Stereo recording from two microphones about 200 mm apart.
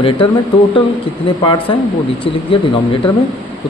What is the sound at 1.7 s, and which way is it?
Speech, 25° left (ahead or behind).